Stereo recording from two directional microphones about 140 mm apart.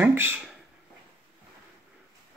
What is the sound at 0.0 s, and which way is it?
Speech, 15° right (ahead or behind).